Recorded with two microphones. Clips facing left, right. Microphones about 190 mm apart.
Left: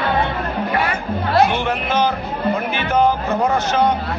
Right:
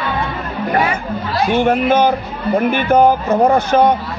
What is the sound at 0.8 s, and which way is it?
Speech, 60° left (ahead or behind).